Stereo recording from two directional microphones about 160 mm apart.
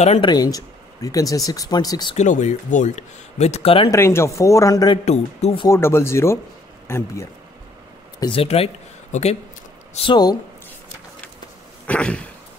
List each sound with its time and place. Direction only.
0.2 s speech: 25° left (ahead or behind)
2.1 s speech: 50° left (ahead or behind)
3.9 s speech: 15° left (ahead or behind)
5.0 s speech: 45° left (ahead or behind)
5.7 s speech: 15° left (ahead or behind)
8.2 s speech: 35° left (ahead or behind)
9.9 s speech: 30° left (ahead or behind)
11.9 s speech: 10° left (ahead or behind)